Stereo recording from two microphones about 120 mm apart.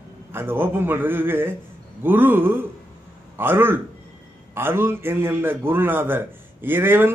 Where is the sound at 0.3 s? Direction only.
20° right (ahead or behind).